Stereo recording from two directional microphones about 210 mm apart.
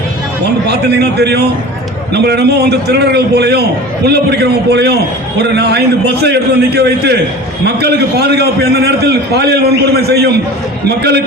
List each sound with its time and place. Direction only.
0.4 s a man's voice: 50° right (ahead or behind)